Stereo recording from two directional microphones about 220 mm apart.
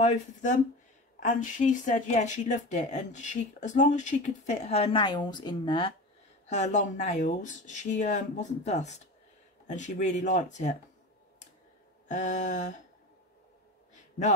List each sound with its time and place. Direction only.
0.0 s speech: 35° left (ahead or behind)
12.1 s speech: 35° left (ahead or behind)